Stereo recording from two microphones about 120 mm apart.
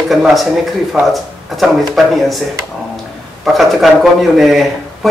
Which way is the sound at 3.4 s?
Centre (ahead or behind).